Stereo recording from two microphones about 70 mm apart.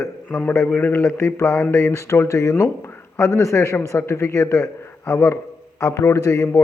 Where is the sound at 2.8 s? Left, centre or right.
Left.